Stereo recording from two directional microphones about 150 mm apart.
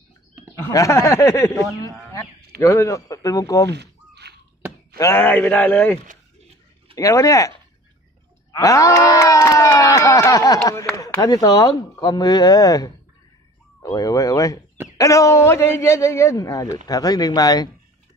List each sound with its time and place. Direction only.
0.7 s speech: 20° left (ahead or behind)
2.6 s speech: 20° left (ahead or behind)
3.7 s a sound: 90° right
4.9 s a man's voice: 15° left (ahead or behind)
7.0 s speech: 20° left (ahead or behind)